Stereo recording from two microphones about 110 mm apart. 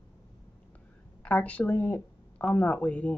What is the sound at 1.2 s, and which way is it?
A woman's voice, 10° left (ahead or behind).